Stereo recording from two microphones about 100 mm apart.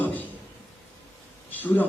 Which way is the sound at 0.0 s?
15° left (ahead or behind).